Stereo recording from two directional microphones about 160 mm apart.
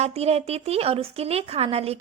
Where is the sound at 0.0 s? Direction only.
40° right (ahead or behind).